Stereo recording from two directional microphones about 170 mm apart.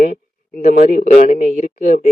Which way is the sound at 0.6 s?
50° left (ahead or behind).